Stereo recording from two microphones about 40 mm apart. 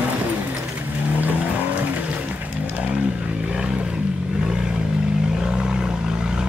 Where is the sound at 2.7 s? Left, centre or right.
Right.